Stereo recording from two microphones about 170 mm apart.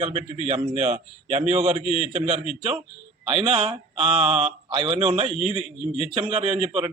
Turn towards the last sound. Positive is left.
turn(degrees=-35)  # may be behind; listen again after turning